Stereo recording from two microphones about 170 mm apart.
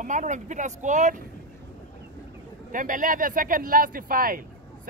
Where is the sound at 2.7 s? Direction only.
50° right (ahead or behind).